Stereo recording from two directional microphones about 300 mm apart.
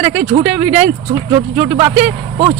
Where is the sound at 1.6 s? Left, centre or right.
Centre.